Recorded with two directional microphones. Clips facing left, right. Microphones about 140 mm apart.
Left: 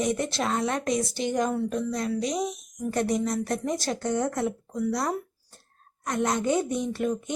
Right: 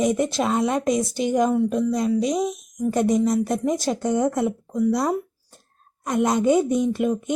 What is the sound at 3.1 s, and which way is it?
Speech, centre (ahead or behind).